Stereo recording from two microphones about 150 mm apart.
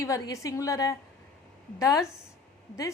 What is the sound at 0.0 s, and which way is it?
A woman's voice, 20° left (ahead or behind).